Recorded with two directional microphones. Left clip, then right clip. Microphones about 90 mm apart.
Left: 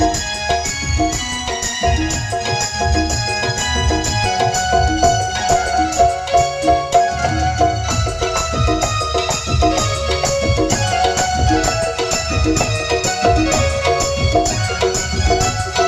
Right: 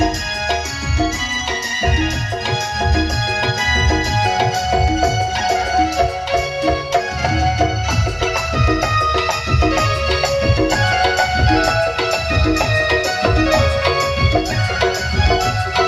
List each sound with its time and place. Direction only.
3.7 s music: 40° left (ahead or behind)
8.7 s music: 35° left (ahead or behind)
12.5 s music: 40° left (ahead or behind)